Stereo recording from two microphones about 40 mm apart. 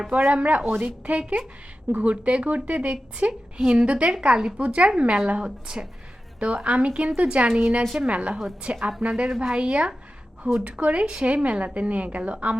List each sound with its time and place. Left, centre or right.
0.1 s a woman's voice: right